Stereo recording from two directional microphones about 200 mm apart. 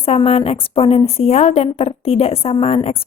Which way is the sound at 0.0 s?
30° left (ahead or behind).